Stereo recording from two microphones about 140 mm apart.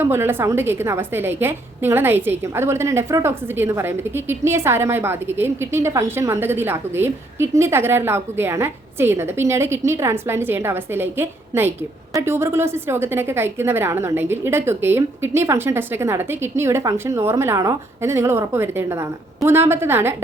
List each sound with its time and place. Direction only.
0.0 s a woman's voice: 15° right (ahead or behind)